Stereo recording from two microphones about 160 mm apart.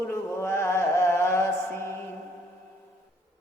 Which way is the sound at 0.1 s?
15° left (ahead or behind).